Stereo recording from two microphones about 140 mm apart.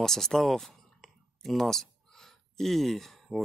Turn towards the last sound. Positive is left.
turn(degrees=0)  # may be behind; listen again after turning